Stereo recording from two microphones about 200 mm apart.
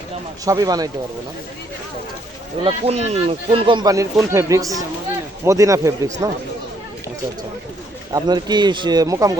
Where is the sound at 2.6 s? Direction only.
30° right (ahead or behind).